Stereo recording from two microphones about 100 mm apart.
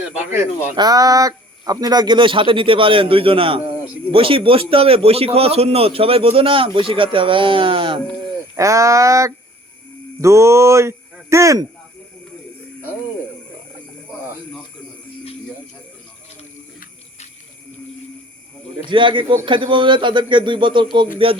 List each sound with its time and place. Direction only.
0.2 s speech: 25° right (ahead or behind)
0.8 s a man's voice: 40° right (ahead or behind); by 8.0 s 55° right (ahead or behind)
8.5 s a sound: 30° right (ahead or behind)
10.2 s speech: 30° right (ahead or behind)
18.9 s a man's voice: 55° right (ahead or behind)